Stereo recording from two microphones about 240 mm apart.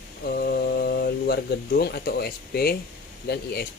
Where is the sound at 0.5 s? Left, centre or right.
Left.